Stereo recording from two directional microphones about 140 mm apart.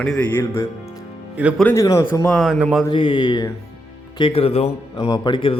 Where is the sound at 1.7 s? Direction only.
20° left (ahead or behind).